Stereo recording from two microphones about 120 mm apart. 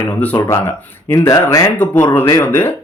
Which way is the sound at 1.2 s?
25° left (ahead or behind).